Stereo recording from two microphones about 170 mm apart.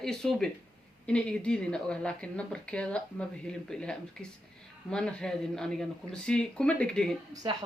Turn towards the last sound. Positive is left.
turn(degrees=-20)  # may be behind; listen again after turning